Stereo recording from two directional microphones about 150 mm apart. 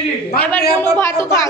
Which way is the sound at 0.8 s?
15° left (ahead or behind).